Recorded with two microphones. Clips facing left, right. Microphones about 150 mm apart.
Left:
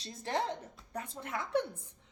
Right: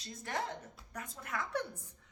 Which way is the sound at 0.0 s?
30° left (ahead or behind).